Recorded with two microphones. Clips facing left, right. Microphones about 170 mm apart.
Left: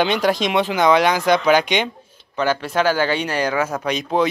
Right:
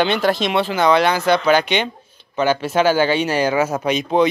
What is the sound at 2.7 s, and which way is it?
Speech, 25° right (ahead or behind).